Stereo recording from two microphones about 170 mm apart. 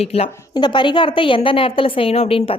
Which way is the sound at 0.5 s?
25° left (ahead or behind).